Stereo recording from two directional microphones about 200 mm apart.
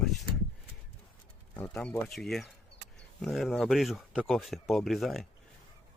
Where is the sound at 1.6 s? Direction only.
5° left (ahead or behind).